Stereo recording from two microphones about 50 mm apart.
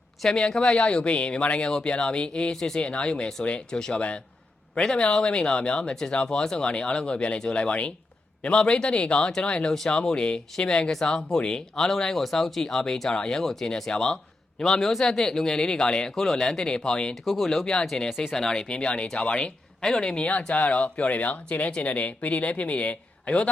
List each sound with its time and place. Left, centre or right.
0.3 s speech: centre
3.8 s speech: centre
17.2 s speech: centre
18.2 s speech: centre
20.2 s speech: left